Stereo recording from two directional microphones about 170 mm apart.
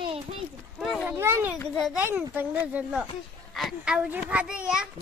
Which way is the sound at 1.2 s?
15° right (ahead or behind).